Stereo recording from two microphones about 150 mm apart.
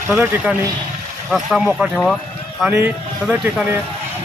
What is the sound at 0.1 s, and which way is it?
Speech, 15° right (ahead or behind).